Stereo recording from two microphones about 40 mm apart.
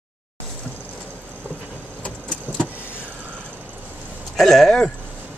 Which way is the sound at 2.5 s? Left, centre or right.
Right.